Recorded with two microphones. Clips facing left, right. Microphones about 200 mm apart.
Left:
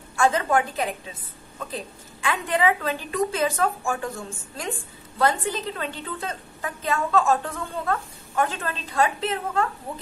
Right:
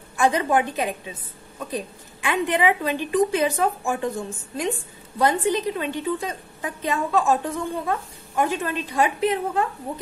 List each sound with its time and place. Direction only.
0.1 s a woman's voice: 15° right (ahead or behind)
2.2 s a woman's voice: 20° right (ahead or behind)